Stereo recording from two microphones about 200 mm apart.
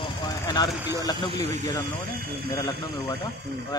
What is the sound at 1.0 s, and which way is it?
Speech, 20° left (ahead or behind).